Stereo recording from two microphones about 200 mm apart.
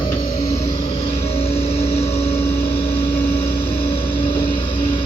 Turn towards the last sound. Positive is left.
turn(degrees=25)  # may be behind; listen again after turning